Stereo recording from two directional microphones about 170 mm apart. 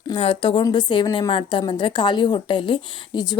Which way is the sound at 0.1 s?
30° left (ahead or behind).